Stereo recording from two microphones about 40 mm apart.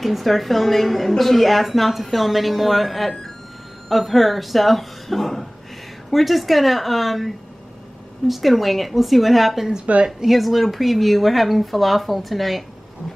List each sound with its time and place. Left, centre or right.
0.0 s a woman's voice: centre
9.9 s speech: right
10.3 s a woman's voice: centre